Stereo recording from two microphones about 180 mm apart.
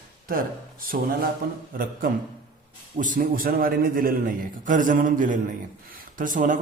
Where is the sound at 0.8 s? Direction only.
55° right (ahead or behind).